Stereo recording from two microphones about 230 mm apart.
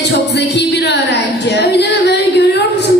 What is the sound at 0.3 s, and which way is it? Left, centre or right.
Music, left.